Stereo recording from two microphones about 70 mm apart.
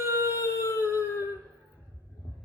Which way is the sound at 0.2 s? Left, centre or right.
Left.